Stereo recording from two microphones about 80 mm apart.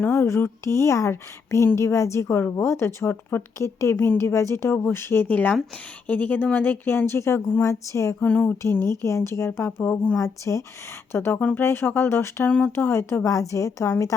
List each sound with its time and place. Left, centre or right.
0.0 s a woman's voice: left
8.2 s speech: left
9.0 s a woman's voice: left; by 10.2 s centre
10.2 s a woman's voice: left
11.1 s a woman's voice: left
12.5 s speech: centre
12.7 s a woman's voice: left